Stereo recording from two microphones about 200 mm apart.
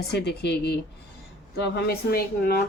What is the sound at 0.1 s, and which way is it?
Speech, 55° left (ahead or behind).